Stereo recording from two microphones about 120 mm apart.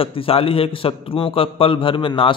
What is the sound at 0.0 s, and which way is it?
A man's voice, 50° left (ahead or behind).